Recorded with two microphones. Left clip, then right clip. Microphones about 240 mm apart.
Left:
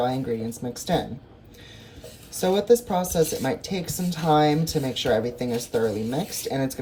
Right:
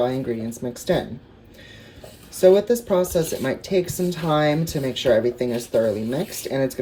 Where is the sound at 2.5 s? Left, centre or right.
Centre.